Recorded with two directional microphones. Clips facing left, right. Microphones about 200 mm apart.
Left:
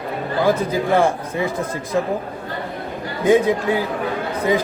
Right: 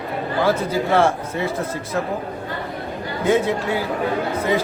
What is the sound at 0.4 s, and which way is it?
A man's voice, 15° left (ahead or behind).